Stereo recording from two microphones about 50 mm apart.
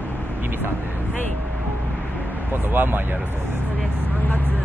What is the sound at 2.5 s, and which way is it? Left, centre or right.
Speech, right.